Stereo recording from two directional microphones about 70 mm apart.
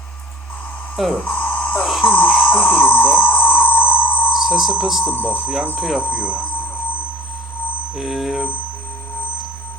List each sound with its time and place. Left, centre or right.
1.2 s a sound: left
1.8 s a sound: centre
2.0 s a sound: left
4.3 s alarm: centre
4.8 s speech: centre
5.0 s speech: left
5.7 s speech: centre
6.1 s speech: left
7.9 s speech: centre